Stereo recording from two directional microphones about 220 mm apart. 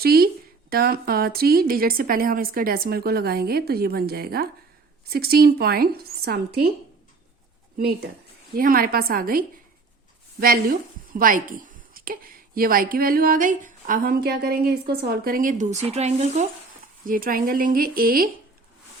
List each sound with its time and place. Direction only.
0.0 s a woman's voice: 45° right (ahead or behind)
7.8 s a woman's voice: 45° right (ahead or behind)
11.1 s a woman's voice: 40° right (ahead or behind)